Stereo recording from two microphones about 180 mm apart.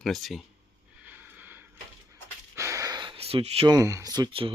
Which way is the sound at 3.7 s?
20° right (ahead or behind).